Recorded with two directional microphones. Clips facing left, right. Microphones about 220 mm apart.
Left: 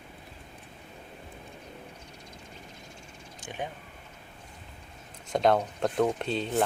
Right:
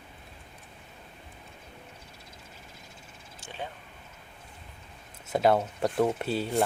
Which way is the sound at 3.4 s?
15° left (ahead or behind).